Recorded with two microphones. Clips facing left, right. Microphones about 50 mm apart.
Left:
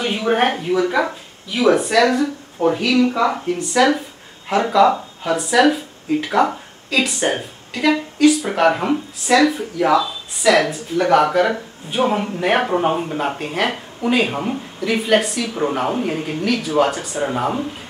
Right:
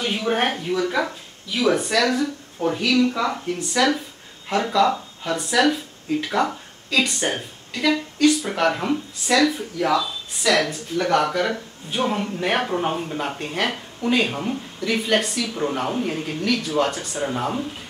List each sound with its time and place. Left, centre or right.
0.0 s speech: centre